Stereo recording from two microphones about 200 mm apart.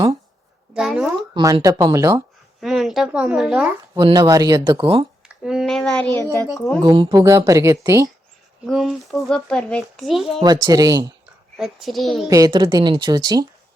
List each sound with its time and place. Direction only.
0.7 s a sound: 5° right (ahead or behind)
1.3 s a woman's voice: 20° right (ahead or behind)
2.6 s speech: centre (ahead or behind)
3.9 s speech: 20° right (ahead or behind)
5.3 s speech: 5° right (ahead or behind)
6.8 s a woman's voice: 25° right (ahead or behind)
8.6 s speech: centre (ahead or behind)
10.4 s speech: 20° right (ahead or behind)
11.5 s speech: centre (ahead or behind)
12.3 s speech: 20° right (ahead or behind)